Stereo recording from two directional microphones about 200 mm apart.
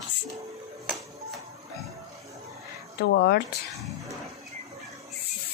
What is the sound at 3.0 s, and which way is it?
Speech, 55° left (ahead or behind).